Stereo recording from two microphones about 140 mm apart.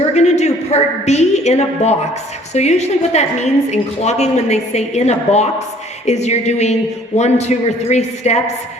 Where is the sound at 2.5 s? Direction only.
55° left (ahead or behind).